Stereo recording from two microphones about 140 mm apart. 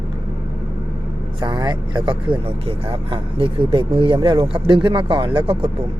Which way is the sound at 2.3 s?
40° right (ahead or behind).